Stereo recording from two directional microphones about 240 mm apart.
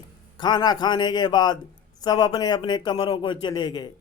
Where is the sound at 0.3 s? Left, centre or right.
Centre.